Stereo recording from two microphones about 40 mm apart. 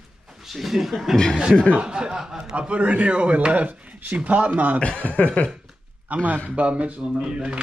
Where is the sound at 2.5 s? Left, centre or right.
Right.